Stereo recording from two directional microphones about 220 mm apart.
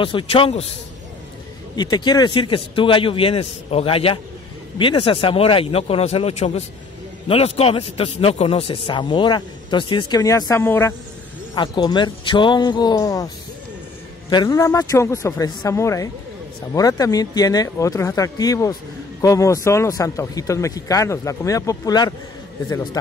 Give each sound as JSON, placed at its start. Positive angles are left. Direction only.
{"t": 0.0, "sound": "a man's voice", "side_deg": 25}
{"t": 1.8, "sound": "a man's voice", "side_deg": 20}
{"t": 14.3, "sound": "speech", "side_deg": 15}